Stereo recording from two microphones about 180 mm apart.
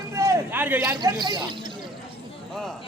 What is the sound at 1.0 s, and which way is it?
Speech, 25° right (ahead or behind).